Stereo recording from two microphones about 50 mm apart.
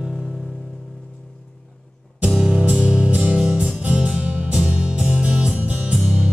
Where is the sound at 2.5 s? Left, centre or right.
Right.